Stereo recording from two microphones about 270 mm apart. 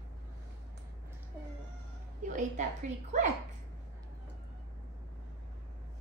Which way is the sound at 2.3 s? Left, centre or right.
Right.